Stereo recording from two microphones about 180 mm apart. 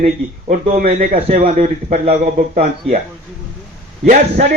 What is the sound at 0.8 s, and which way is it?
A man's voice, 50° right (ahead or behind).